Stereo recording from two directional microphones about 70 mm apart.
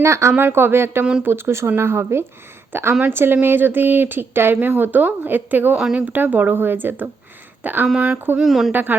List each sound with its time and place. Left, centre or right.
0.0 s speech: right
0.3 s speech: right
3.4 s a sound: right
5.7 s speech: centre
6.0 s a sound: right
7.6 s speech: right
7.9 s speech: centre
8.4 s speech: centre
8.7 s a sound: right